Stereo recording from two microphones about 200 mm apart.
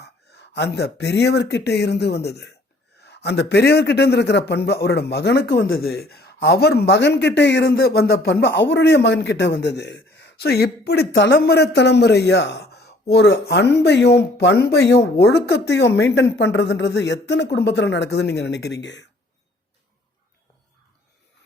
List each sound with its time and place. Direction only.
0.0 s speech: 55° left (ahead or behind)